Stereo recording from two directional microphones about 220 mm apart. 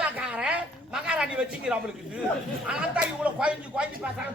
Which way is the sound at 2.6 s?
5° right (ahead or behind).